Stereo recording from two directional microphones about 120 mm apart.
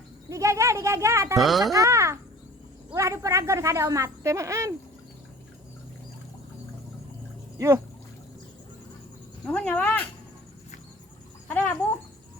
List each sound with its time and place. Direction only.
0.3 s speech: 25° right (ahead or behind)
1.4 s speech: centre (ahead or behind)
1.7 s speech: 25° right (ahead or behind)
9.5 s speech: 10° left (ahead or behind)
11.4 s a sound: 10° left (ahead or behind)